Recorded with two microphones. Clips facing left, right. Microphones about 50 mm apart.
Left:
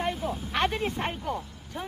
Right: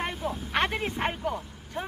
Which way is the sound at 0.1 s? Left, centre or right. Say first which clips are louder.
Even; centre.